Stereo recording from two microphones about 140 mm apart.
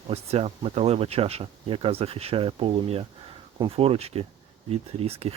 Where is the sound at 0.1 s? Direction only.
45° right (ahead or behind).